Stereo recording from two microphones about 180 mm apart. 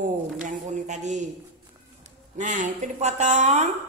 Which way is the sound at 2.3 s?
45° right (ahead or behind).